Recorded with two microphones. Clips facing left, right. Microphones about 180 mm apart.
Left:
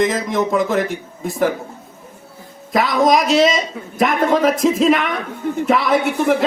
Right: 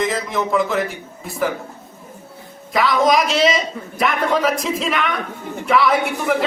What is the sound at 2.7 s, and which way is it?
Speech, 45° left (ahead or behind).